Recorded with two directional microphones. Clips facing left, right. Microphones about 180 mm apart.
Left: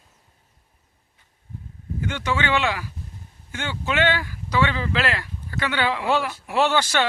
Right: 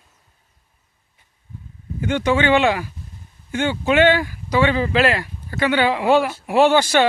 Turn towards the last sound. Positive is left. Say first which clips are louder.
# right 6 dB
turn(degrees=-15)  # may be behind; listen again after turning